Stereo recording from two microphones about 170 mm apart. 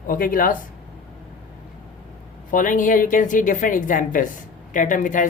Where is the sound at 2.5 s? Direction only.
50° left (ahead or behind).